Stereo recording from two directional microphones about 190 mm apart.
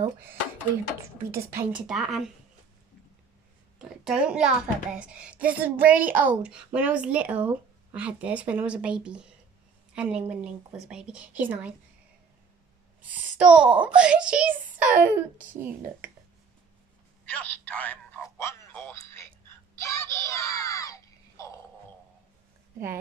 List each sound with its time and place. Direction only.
1.5 s a woman's voice: 10° right (ahead or behind)
4.0 s a woman's voice: 5° right (ahead or behind)
13.0 s a woman's voice: 5° right (ahead or behind)
17.3 s telephone: 5° left (ahead or behind)
19.8 s a sound: 15° left (ahead or behind)